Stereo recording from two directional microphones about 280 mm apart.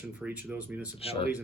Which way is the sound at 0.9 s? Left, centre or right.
Left.